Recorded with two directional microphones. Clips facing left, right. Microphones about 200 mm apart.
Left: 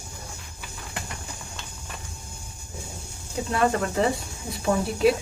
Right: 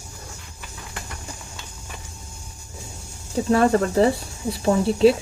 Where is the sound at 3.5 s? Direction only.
35° right (ahead or behind).